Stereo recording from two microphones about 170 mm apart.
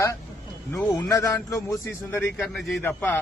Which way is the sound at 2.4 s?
Centre (ahead or behind).